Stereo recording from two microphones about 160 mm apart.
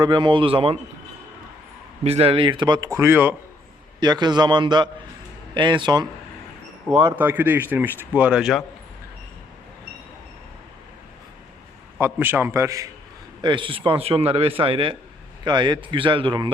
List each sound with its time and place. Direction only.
0.0 s a man's voice: 30° right (ahead or behind)
2.0 s speech: 40° right (ahead or behind); by 3.3 s 15° right (ahead or behind)
4.0 s speech: 25° right (ahead or behind)
7.0 s speech: 10° right (ahead or behind)
11.9 s speech: 15° right (ahead or behind)
13.4 s a man's voice: 30° right (ahead or behind)